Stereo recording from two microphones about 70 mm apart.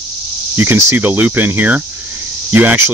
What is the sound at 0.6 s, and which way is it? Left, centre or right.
Speech, right.